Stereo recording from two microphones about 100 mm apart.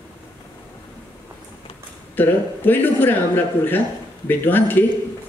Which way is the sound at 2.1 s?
20° left (ahead or behind).